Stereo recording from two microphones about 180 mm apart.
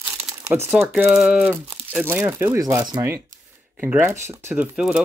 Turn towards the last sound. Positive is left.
turn(degrees=-5)  # may be behind; listen again after turning